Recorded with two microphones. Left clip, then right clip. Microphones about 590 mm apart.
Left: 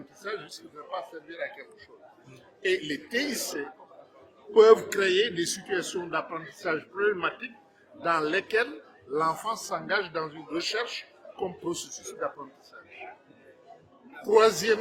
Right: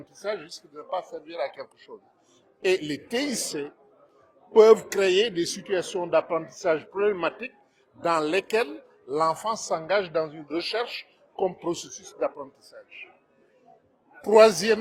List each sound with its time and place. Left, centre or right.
0.2 s a man's voice: right
14.3 s a man's voice: right